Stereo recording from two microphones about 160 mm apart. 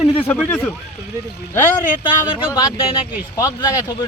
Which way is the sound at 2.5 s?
20° left (ahead or behind).